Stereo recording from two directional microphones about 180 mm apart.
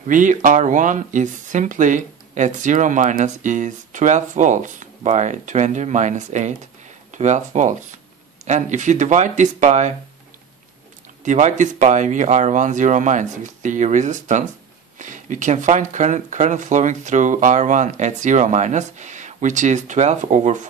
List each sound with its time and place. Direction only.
0.0 s speech: 45° right (ahead or behind)
11.2 s speech: 45° right (ahead or behind)